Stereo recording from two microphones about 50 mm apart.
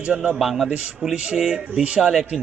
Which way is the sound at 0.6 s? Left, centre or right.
Right.